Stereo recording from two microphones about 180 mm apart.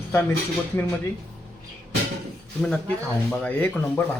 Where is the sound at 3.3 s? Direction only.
10° left (ahead or behind).